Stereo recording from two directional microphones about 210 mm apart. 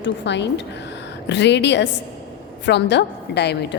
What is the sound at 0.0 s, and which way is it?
A woman's voice, 55° left (ahead or behind).